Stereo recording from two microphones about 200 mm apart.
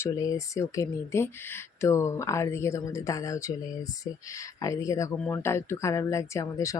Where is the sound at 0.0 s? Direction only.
15° left (ahead or behind).